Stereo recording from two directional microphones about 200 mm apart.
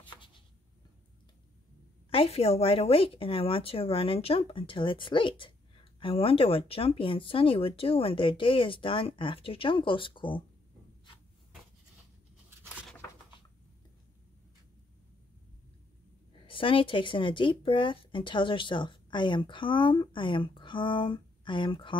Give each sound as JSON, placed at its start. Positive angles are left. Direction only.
{"t": 2.0, "sound": "speech", "side_deg": 30}
{"t": 16.3, "sound": "speech", "side_deg": 25}